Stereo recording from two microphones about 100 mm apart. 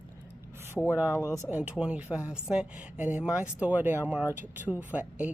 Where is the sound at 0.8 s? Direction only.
20° right (ahead or behind).